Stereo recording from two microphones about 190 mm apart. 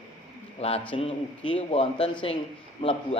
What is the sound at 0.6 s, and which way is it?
A man's voice, 35° left (ahead or behind).